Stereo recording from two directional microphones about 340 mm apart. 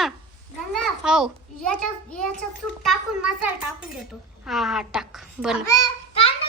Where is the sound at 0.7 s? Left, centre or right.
Centre.